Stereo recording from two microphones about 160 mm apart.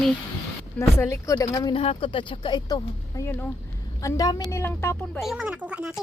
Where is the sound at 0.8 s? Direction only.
20° left (ahead or behind).